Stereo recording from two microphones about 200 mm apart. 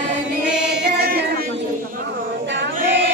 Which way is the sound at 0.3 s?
60° right (ahead or behind).